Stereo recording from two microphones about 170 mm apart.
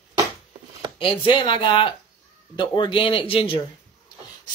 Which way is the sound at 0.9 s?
30° left (ahead or behind).